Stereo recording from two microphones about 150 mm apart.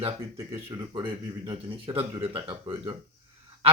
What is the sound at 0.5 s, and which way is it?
Speech, 35° right (ahead or behind).